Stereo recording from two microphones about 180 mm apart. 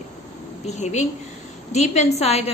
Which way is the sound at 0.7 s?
40° left (ahead or behind).